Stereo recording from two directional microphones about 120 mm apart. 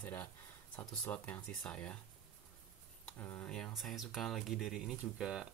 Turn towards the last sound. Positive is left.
turn(degrees=-5)  # may be behind; listen again after turning